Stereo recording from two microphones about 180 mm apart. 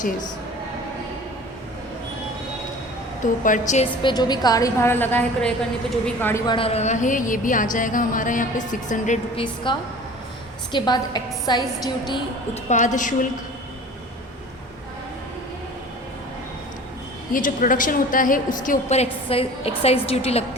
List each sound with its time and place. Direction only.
3.2 s a woman's voice: 45° left (ahead or behind)
4.0 s a woman's voice: 25° left (ahead or behind)
6.4 s a woman's voice: 25° left (ahead or behind); by 9.1 s 45° left (ahead or behind)
9.3 s a woman's voice: 30° left (ahead or behind)
12.6 s a woman's voice: 45° left (ahead or behind)
17.3 s a woman's voice: 50° left (ahead or behind)